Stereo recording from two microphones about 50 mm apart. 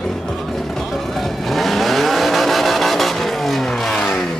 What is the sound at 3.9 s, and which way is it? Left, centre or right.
Vehicle, left.